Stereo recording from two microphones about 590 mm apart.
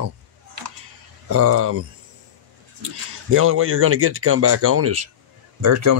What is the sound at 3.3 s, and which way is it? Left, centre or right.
Speech, right.